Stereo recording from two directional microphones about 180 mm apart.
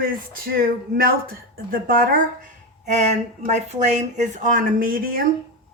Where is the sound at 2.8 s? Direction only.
40° right (ahead or behind).